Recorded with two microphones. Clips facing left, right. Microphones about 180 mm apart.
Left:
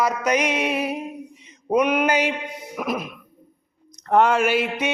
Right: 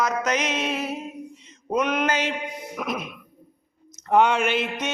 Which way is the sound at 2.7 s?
5° left (ahead or behind).